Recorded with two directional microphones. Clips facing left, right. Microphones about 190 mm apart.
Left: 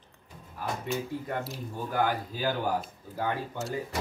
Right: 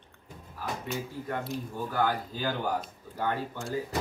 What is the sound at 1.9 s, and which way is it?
Speech, 15° left (ahead or behind).